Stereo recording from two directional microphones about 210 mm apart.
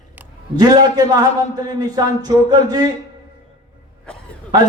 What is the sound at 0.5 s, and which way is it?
A man's voice, 20° right (ahead or behind).